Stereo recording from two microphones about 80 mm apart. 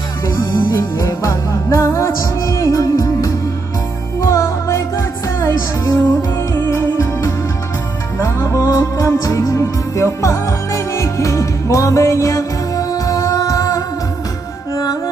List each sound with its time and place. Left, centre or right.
0.5 s music: left